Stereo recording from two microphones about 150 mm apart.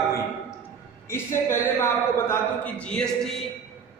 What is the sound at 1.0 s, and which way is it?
A man's voice, 15° left (ahead or behind).